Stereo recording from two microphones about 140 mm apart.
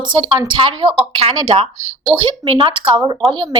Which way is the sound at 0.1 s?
35° right (ahead or behind).